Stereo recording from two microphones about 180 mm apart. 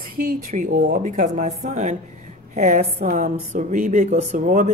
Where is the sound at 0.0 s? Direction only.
50° right (ahead or behind).